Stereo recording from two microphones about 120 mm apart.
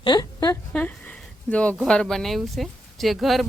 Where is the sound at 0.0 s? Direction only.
35° left (ahead or behind).